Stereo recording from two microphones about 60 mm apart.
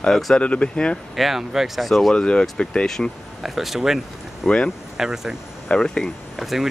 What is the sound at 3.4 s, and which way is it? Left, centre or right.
Speech, centre.